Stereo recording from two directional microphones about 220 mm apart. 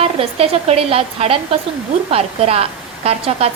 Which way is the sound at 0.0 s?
25° right (ahead or behind).